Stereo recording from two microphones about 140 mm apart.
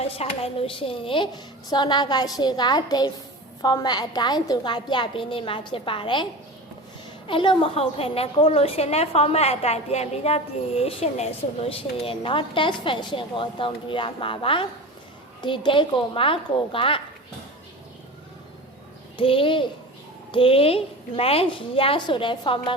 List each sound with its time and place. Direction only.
0.0 s a woman's voice: 45° left (ahead or behind)
7.3 s a woman's voice: 40° left (ahead or behind)
19.1 s a woman's voice: 40° left (ahead or behind)